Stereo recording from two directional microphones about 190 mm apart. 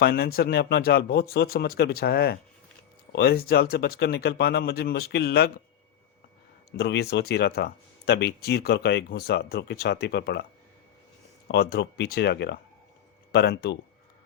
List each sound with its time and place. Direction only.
0.0 s speech: 55° left (ahead or behind)
6.7 s speech: 60° left (ahead or behind)
11.4 s speech: 60° left (ahead or behind)